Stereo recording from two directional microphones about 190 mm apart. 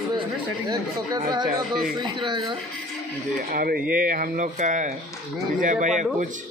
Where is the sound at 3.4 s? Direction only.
50° right (ahead or behind).